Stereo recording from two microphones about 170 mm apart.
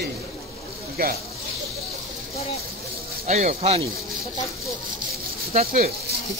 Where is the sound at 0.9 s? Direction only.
60° right (ahead or behind).